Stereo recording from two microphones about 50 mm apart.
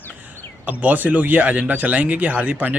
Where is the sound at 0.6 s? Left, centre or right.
Right.